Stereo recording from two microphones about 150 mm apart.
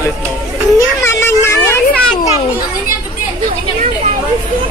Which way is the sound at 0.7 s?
15° left (ahead or behind).